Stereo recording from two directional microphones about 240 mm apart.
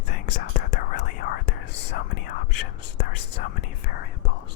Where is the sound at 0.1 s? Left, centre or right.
Left.